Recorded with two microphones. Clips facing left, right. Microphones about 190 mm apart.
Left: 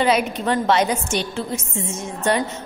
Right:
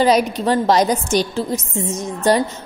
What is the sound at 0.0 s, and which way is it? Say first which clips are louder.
A woman's voice: right 4 dB; 35° right (ahead or behind).